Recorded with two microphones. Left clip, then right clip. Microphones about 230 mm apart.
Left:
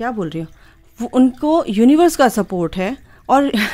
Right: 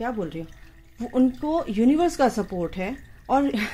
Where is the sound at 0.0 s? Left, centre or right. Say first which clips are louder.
Left 7 dB; left.